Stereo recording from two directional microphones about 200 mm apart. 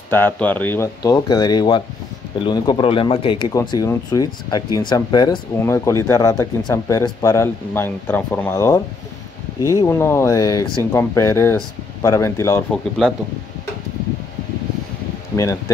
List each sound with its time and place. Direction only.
0.1 s speech: 10° left (ahead or behind)
12.7 s speech: centre (ahead or behind)